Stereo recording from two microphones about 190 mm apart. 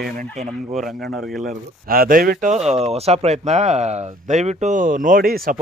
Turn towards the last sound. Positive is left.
turn(degrees=-50)  # may be behind; listen again after turning